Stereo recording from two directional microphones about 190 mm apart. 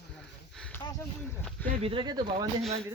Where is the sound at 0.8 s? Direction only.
20° left (ahead or behind).